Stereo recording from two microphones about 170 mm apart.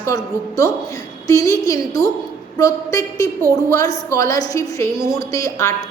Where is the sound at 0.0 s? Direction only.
20° left (ahead or behind).